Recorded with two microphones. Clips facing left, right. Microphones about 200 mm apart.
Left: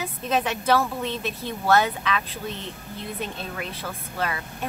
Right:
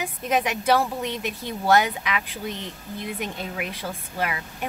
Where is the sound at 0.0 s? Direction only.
15° right (ahead or behind).